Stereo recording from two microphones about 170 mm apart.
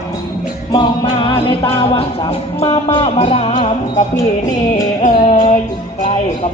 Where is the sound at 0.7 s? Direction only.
25° left (ahead or behind).